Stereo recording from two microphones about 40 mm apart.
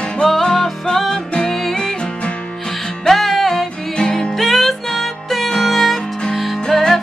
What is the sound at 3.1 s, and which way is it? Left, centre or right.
Music, centre.